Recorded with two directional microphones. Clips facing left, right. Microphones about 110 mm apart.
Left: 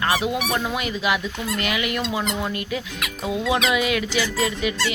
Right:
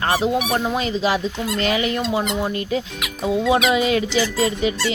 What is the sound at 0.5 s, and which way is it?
Speech, 25° right (ahead or behind).